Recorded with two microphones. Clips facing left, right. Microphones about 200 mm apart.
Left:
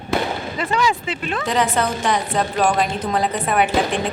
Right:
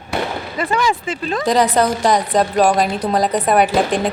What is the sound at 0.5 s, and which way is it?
A woman's voice, 50° right (ahead or behind).